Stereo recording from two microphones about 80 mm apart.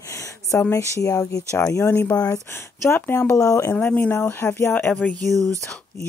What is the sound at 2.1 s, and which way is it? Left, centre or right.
Speech, left.